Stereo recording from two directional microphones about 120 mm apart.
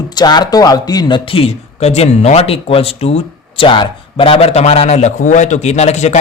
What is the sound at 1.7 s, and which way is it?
Speech, 65° left (ahead or behind).